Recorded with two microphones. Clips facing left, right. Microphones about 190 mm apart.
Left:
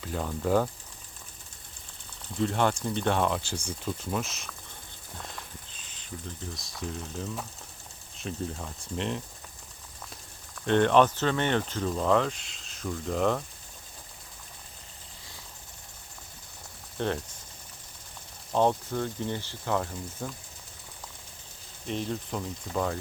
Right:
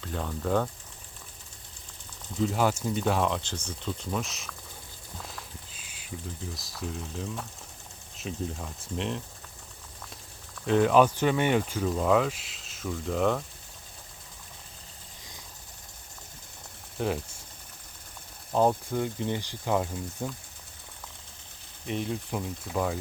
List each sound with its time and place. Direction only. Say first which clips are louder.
0.0 s speech: left 2 dB; 5° left (ahead or behind)
2.4 s speech: even; 5° right (ahead or behind)
5.1 s a sound: even; centre (ahead or behind)
6.5 s speech: left 1 dB; centre (ahead or behind)
10.7 s speech: even; 5° right (ahead or behind)
17.0 s speech: even; 5° right (ahead or behind)
18.5 s speech: right 1 dB; 5° right (ahead or behind)
21.8 s speech: right 1 dB; 10° right (ahead or behind)